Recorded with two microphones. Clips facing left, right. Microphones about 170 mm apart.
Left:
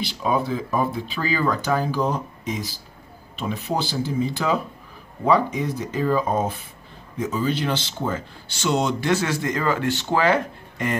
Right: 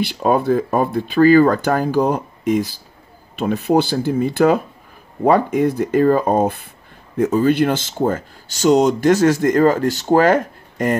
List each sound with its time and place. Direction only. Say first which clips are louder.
0.0 s speech: right 6 dB; 55° right (ahead or behind)